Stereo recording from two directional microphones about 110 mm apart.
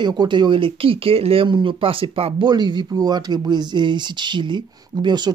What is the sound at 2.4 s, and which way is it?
Speech, 45° right (ahead or behind).